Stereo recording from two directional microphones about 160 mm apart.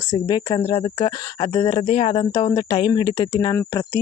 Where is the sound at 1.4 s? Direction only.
25° left (ahead or behind).